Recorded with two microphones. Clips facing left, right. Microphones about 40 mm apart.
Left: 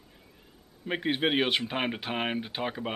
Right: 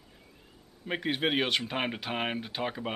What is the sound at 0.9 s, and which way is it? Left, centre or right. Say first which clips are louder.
Speech: left 2 dB; centre.